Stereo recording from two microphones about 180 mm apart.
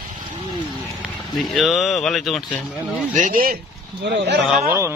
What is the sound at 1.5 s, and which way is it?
Speech, centre (ahead or behind).